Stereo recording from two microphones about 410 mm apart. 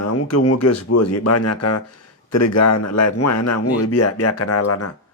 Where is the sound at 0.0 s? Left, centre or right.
Left.